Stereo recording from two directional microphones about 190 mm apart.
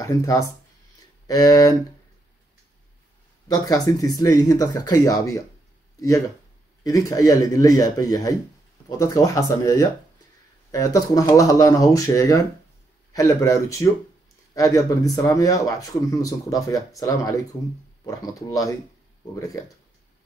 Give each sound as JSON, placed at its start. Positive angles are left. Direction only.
{"t": 0.0, "sound": "speech", "side_deg": 15}
{"t": 3.4, "sound": "speech", "side_deg": 20}